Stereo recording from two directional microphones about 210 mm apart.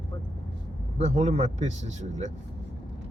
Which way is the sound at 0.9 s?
30° right (ahead or behind).